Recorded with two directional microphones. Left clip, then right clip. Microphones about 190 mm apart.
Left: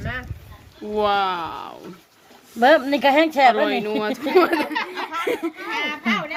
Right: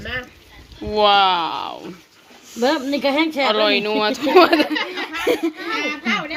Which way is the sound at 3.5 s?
Centre (ahead or behind).